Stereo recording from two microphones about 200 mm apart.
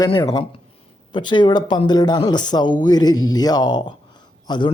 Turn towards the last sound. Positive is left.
turn(degrees=20)  # may be behind; listen again after turning